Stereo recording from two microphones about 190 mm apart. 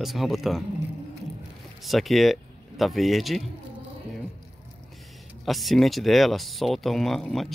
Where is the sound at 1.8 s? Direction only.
Centre (ahead or behind).